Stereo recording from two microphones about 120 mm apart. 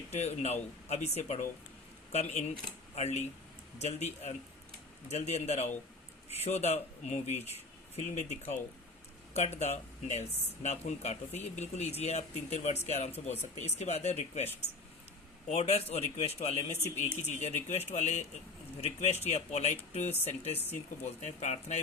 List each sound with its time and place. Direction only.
0.1 s a man's voice: 65° left (ahead or behind)
15.4 s a man's voice: 65° left (ahead or behind)